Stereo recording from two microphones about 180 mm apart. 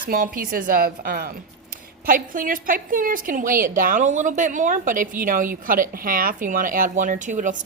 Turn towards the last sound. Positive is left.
turn(degrees=-45)  # may be behind; listen again after turning